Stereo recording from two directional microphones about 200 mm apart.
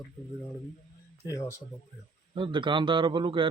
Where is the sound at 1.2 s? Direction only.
15° left (ahead or behind).